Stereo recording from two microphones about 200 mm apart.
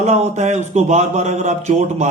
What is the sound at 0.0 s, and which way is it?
A man's voice, 35° right (ahead or behind).